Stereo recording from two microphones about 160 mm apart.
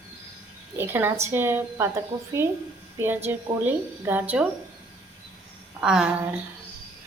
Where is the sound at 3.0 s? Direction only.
15° right (ahead or behind).